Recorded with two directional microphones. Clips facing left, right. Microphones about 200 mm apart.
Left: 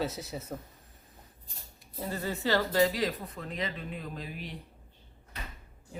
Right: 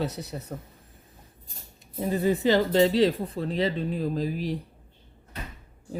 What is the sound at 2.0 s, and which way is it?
Speech, 15° right (ahead or behind).